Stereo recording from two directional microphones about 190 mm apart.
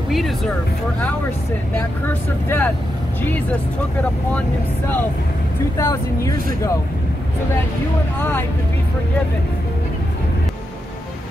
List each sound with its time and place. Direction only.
0.1 s speech: centre (ahead or behind)
2.4 s speech: 10° left (ahead or behind)
4.3 s speech: 10° left (ahead or behind)
8.2 s speech: 10° left (ahead or behind)